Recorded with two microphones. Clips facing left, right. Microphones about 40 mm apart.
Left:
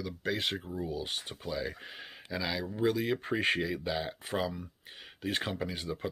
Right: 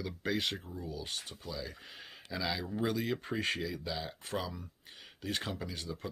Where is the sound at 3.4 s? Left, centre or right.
Left.